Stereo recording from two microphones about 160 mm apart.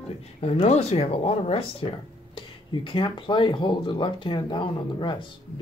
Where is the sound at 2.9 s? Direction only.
30° left (ahead or behind).